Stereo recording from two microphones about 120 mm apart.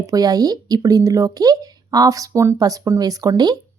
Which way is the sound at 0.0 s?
30° right (ahead or behind).